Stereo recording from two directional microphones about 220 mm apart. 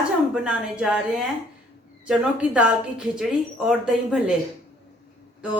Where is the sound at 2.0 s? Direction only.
5° right (ahead or behind).